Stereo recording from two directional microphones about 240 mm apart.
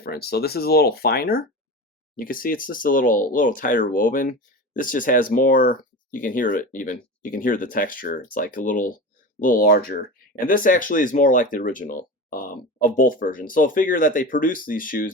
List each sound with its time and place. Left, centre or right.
0.0 s speech: left